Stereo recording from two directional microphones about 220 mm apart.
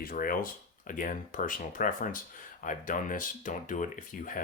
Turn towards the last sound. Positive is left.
turn(degrees=35)  # may be behind; listen again after turning